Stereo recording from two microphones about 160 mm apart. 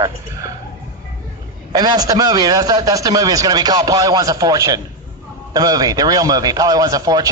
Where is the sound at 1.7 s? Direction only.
25° right (ahead or behind).